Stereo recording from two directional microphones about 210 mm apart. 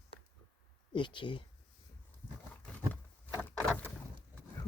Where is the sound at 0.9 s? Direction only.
20° left (ahead or behind).